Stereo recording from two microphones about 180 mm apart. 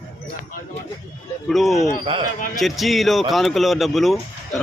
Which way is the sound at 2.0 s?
30° right (ahead or behind).